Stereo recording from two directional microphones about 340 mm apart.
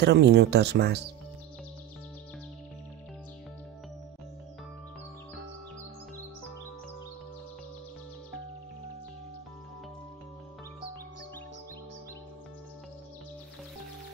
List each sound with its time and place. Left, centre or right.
0.0 s speech: right